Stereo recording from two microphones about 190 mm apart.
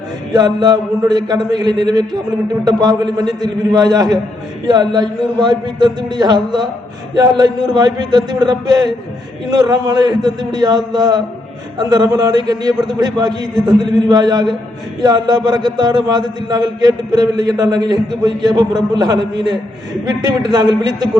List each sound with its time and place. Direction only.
0.3 s a man's voice: 20° right (ahead or behind)